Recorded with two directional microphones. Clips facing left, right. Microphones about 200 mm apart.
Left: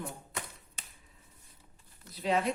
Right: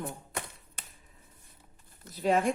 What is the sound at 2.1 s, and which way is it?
Speech, 45° right (ahead or behind).